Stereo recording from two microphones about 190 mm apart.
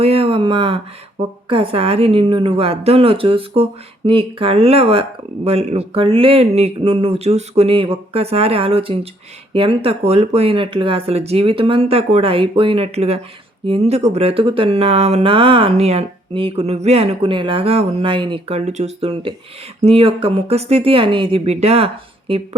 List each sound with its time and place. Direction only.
0.0 s speech: 30° right (ahead or behind)